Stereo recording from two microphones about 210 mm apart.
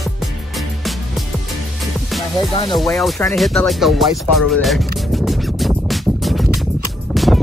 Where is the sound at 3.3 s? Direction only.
Centre (ahead or behind).